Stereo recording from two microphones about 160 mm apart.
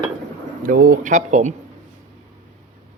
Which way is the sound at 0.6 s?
60° right (ahead or behind).